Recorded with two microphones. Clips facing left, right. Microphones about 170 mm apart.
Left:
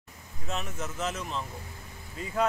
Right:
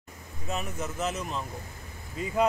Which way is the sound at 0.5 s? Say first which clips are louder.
Right 2 dB; 10° right (ahead or behind).